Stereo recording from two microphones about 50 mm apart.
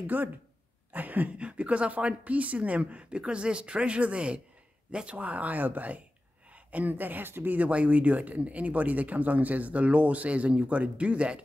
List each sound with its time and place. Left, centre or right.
0.0 s speech: right
7.5 s speech: right